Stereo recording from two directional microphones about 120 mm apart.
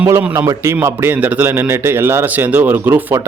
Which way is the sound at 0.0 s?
15° right (ahead or behind).